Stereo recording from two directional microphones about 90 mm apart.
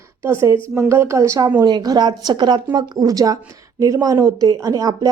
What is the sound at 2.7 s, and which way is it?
A woman's voice, 50° right (ahead or behind).